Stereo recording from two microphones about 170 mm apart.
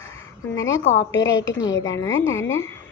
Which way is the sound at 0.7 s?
90° left.